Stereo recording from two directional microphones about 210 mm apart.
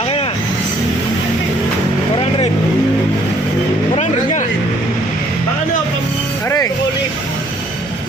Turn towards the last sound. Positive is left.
turn(degrees=15)  # may be behind; listen again after turning